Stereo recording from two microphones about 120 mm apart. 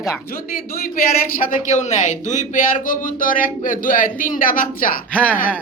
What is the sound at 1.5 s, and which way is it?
A man's voice, 90° left.